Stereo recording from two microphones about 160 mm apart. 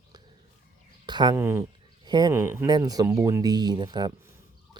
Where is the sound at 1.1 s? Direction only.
25° right (ahead or behind).